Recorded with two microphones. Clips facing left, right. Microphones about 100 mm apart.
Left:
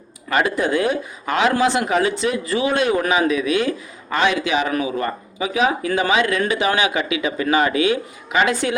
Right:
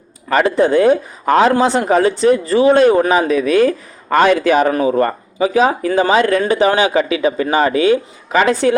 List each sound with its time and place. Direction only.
0.3 s speech: 35° right (ahead or behind)